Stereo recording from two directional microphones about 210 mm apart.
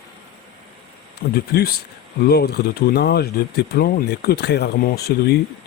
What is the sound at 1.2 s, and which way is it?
Speech, 50° left (ahead or behind).